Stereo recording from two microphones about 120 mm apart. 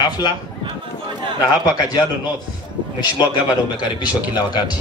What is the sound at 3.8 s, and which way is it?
A man's voice, 35° left (ahead or behind).